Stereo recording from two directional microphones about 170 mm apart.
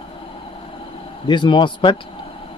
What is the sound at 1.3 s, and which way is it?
Speech, 30° left (ahead or behind).